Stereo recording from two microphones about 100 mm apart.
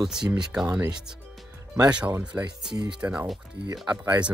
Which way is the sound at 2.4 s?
45° right (ahead or behind).